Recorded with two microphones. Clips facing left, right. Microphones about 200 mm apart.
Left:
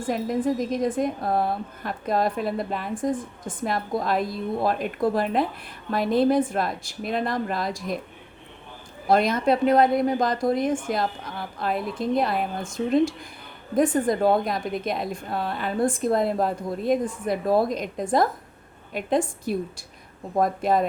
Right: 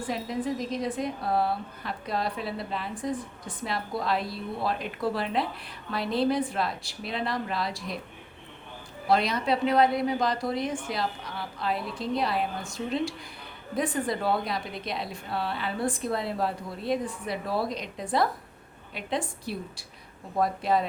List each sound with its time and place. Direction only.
0.0 s a woman's voice: 50° left (ahead or behind)
9.0 s a woman's voice: 50° left (ahead or behind)